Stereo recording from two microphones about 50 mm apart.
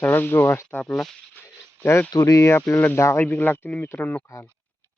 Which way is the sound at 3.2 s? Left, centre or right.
Left.